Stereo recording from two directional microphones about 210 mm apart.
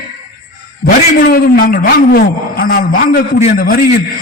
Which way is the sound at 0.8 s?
45° left (ahead or behind).